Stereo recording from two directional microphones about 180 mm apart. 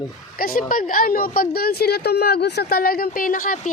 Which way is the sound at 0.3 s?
55° left (ahead or behind).